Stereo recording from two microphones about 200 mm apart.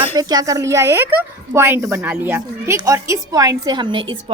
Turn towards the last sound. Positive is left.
turn(degrees=-25)  # may be behind; listen again after turning